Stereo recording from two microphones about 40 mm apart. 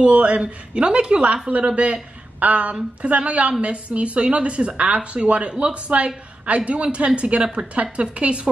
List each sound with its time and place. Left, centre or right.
0.0 s speech: right